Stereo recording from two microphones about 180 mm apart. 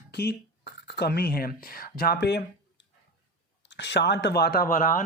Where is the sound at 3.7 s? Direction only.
70° left (ahead or behind); by 5.0 s 50° left (ahead or behind).